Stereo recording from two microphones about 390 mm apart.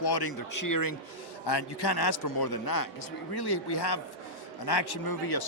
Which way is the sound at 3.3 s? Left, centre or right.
Left.